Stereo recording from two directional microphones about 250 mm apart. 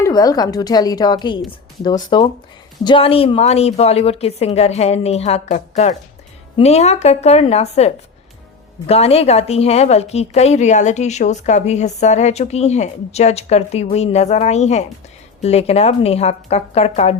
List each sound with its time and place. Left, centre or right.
0.0 s a woman's voice: centre